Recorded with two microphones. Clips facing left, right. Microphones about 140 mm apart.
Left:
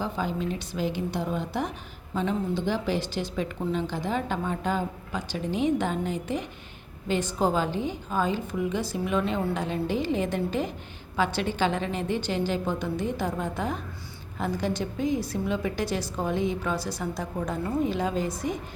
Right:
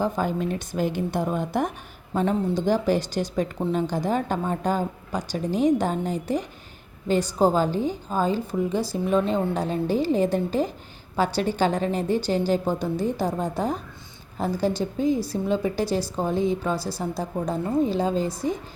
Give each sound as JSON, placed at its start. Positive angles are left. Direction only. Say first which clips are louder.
{"t": 0.0, "sound": "a woman's voice", "louder": "right 5 dB", "side_deg": -50}